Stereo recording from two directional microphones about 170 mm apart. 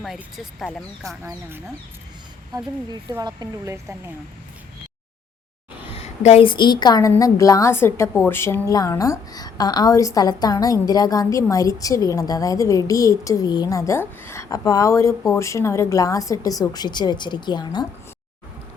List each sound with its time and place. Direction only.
0.0 s speech: centre (ahead or behind)
1.0 s speech: 15° right (ahead or behind)
2.9 s speech: 20° right (ahead or behind)
5.8 s a woman's voice: 35° left (ahead or behind)